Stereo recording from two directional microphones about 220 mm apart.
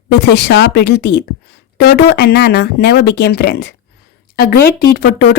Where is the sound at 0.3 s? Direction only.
50° left (ahead or behind).